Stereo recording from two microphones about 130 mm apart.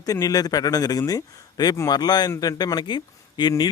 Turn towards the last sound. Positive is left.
turn(degrees=30)  # may be behind; listen again after turning